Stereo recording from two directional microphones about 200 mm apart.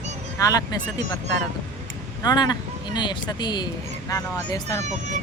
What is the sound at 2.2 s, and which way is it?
Speech, 20° left (ahead or behind).